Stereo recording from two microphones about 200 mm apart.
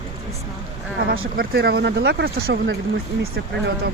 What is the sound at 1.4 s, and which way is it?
Speech, 50° right (ahead or behind).